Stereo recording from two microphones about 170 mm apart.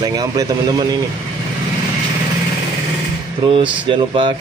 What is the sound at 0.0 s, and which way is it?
Speech, 25° right (ahead or behind).